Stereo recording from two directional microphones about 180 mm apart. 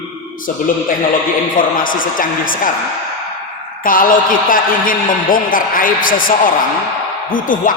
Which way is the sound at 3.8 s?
50° left (ahead or behind).